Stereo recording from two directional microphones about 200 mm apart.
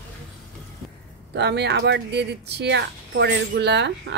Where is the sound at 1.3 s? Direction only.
60° right (ahead or behind).